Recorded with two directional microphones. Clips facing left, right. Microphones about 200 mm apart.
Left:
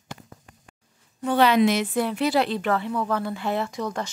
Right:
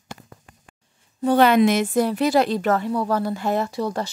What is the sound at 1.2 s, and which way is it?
A woman's voice, 45° right (ahead or behind).